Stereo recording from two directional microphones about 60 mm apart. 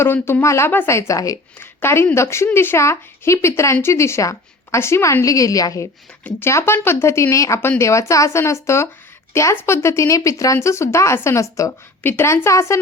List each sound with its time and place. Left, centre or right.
0.0 s speech: left
1.5 s speech: left
4.8 s speech: left
5.2 s a woman's voice: left
6.4 s a woman's voice: left
12.0 s speech: left
12.5 s speech: left